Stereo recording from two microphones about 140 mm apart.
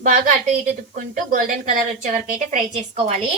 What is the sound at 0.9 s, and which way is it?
A woman's voice, 70° right (ahead or behind).